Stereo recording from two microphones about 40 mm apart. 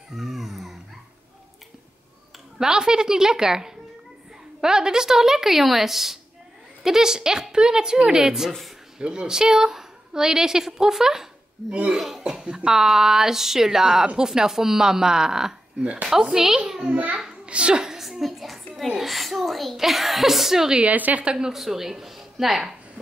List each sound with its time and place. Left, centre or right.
0.1 s a sound: centre
2.6 s a woman's voice: centre
8.5 s a woman's voice: centre
8.9 s a woman's voice: centre
12.4 s a woman's voice: centre
16.8 s a child's voice: right
17.5 s a woman's voice: right
18.2 s a sound: centre
18.9 s a woman's voice: centre
20.8 s a child's voice: right
21.2 s a woman's voice: right
21.5 s speech: centre